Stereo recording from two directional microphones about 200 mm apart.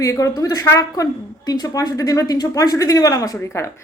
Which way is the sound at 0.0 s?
15° left (ahead or behind).